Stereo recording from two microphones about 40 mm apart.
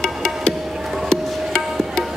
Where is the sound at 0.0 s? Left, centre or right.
Centre.